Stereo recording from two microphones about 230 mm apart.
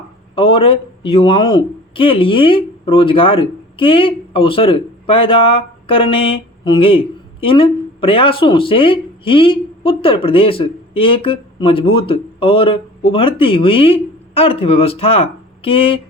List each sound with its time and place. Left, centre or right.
0.3 s speech: left